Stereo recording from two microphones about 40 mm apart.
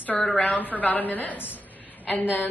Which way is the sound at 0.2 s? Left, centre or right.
Left.